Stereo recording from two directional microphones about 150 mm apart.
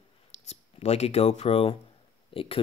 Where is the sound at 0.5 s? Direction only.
45° left (ahead or behind).